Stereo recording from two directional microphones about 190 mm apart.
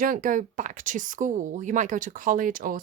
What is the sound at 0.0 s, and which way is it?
Speech, 45° right (ahead or behind).